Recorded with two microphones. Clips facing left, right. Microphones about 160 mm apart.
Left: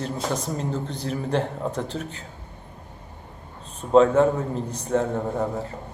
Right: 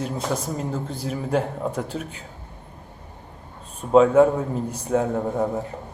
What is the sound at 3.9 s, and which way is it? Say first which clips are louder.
Speech: right 2 dB; 10° right (ahead or behind).